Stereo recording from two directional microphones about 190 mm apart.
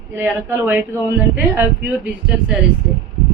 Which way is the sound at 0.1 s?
15° right (ahead or behind).